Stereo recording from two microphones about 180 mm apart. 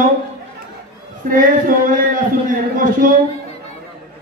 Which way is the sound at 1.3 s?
50° right (ahead or behind).